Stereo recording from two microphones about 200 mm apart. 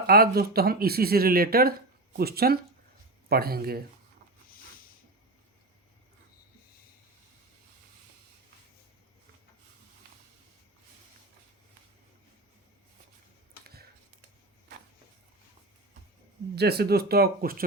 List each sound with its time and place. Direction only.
0.1 s speech: 50° right (ahead or behind)
16.6 s speech: 55° right (ahead or behind)